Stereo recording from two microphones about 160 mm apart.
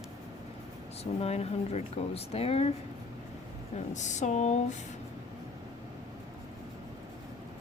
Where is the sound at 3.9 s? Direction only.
50° left (ahead or behind).